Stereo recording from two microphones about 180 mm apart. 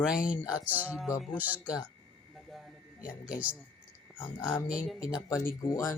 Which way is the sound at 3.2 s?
10° right (ahead or behind).